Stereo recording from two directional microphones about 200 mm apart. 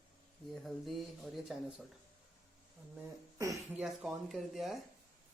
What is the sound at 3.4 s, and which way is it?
Speech, 15° right (ahead or behind).